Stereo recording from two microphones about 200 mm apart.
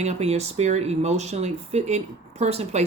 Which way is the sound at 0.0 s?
30° right (ahead or behind).